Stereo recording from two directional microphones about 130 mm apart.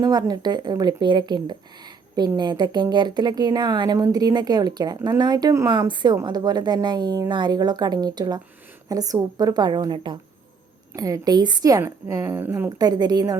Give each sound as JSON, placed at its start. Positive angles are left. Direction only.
{"t": 0.0, "sound": "a woman's voice", "side_deg": -30}